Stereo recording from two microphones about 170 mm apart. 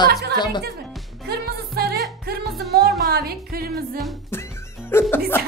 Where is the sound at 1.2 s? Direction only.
65° right (ahead or behind).